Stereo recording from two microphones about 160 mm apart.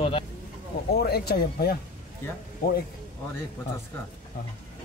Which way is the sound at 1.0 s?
85° left.